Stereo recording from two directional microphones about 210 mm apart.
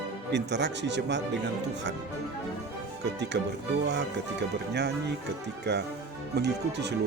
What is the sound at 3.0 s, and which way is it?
Speech, 55° right (ahead or behind).